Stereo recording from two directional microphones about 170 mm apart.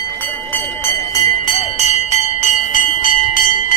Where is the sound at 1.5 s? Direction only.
40° left (ahead or behind).